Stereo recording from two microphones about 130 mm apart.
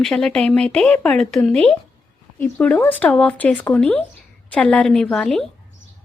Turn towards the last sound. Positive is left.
turn(degrees=5)  # may be behind; listen again after turning